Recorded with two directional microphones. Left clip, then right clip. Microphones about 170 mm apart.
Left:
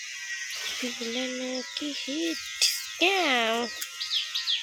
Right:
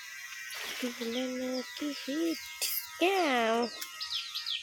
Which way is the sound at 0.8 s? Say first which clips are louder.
Left 1 dB; 5° left (ahead or behind).